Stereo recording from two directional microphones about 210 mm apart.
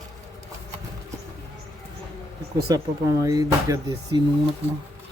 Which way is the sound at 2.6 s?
15° right (ahead or behind).